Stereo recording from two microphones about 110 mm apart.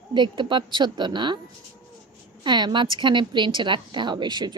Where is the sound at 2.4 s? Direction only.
45° right (ahead or behind).